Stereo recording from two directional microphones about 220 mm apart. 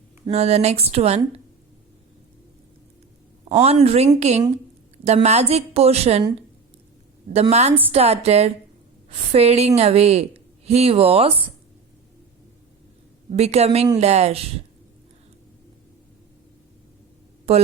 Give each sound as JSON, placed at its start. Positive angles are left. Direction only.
{"t": 0.3, "sound": "a woman's voice", "side_deg": -30}
{"t": 3.5, "sound": "a woman's voice", "side_deg": -30}
{"t": 7.4, "sound": "a woman's voice", "side_deg": -30}
{"t": 7.7, "sound": "a woman's voice", "side_deg": -10}
{"t": 7.9, "sound": "a woman's voice", "side_deg": -30}
{"t": 13.3, "sound": "a woman's voice", "side_deg": -30}
{"t": 17.5, "sound": "speech", "side_deg": -30}